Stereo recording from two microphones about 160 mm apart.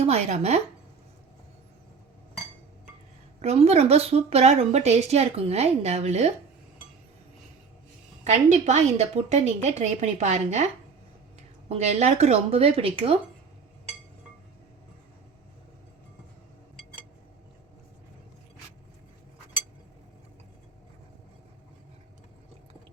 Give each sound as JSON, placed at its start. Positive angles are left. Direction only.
{"t": 0.0, "sound": "a woman's voice", "side_deg": -40}
{"t": 3.4, "sound": "a woman's voice", "side_deg": -40}
{"t": 8.2, "sound": "a woman's voice", "side_deg": -45}
{"t": 11.7, "sound": "a woman's voice", "side_deg": -45}